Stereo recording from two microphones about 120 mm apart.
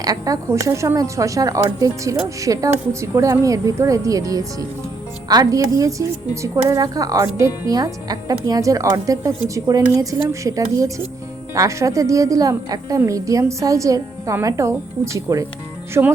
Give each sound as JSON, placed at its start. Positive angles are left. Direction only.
{"t": 0.0, "sound": "a woman's voice", "side_deg": -30}